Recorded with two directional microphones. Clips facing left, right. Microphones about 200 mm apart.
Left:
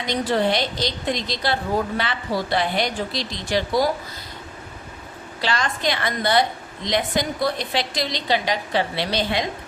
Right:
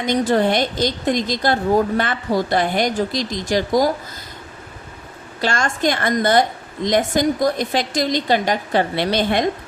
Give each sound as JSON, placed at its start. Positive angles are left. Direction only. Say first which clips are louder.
{"t": 0.0, "sound": "a woman's voice", "louder": "right 4 dB", "side_deg": -50}
{"t": 5.4, "sound": "a woman's voice", "louder": "right 4 dB", "side_deg": -45}